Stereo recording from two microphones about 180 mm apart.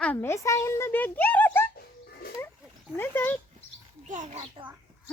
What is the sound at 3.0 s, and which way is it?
Speech, 10° left (ahead or behind).